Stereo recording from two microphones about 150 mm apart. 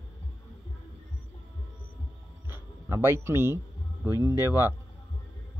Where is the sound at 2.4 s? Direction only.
15° right (ahead or behind).